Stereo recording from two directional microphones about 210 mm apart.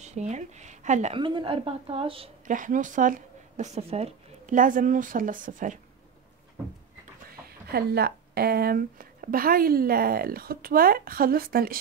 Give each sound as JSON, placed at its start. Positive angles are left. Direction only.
{"t": 0.0, "sound": "a woman's voice", "side_deg": -35}
{"t": 7.4, "sound": "speech", "side_deg": -50}